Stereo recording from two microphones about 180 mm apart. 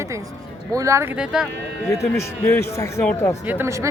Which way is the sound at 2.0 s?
15° left (ahead or behind).